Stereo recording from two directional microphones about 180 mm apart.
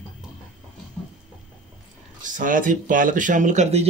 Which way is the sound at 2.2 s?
50° right (ahead or behind).